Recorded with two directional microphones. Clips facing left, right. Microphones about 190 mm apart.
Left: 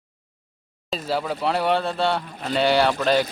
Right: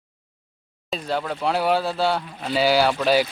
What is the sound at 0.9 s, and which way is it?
Speech, 5° left (ahead or behind).